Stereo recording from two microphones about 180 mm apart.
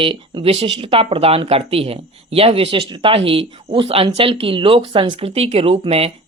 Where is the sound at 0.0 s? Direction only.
30° right (ahead or behind).